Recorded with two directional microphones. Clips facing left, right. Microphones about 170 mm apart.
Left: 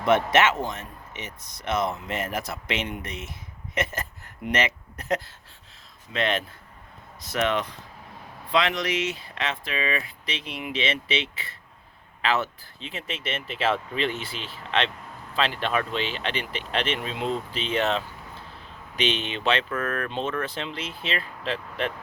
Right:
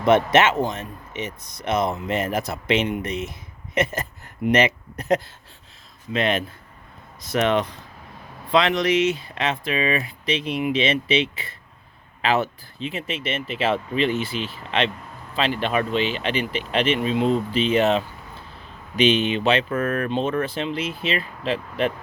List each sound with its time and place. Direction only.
0.0 s a man's voice: 20° right (ahead or behind)